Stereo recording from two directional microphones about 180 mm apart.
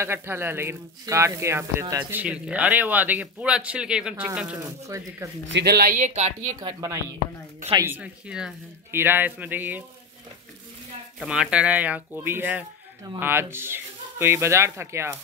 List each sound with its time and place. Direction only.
0.0 s speech: 15° right (ahead or behind)
4.6 s speech: 15° right (ahead or behind)
5.5 s speech: 65° right (ahead or behind); by 6.3 s 40° right (ahead or behind)
6.6 s speech: 20° right (ahead or behind)
11.1 s speech: 5° right (ahead or behind)